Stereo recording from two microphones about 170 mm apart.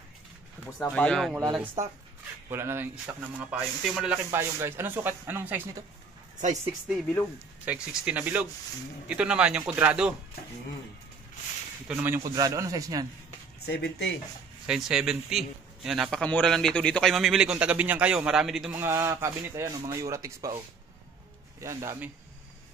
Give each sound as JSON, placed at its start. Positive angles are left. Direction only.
{"t": 0.9, "sound": "a man's voice", "side_deg": 5}
{"t": 2.5, "sound": "speech", "side_deg": -15}
{"t": 7.6, "sound": "speech", "side_deg": -10}
{"t": 11.9, "sound": "a man's voice", "side_deg": -15}
{"t": 13.7, "sound": "speech", "side_deg": 80}
{"t": 14.7, "sound": "a man's voice", "side_deg": -5}
{"t": 18.8, "sound": "speech", "side_deg": -15}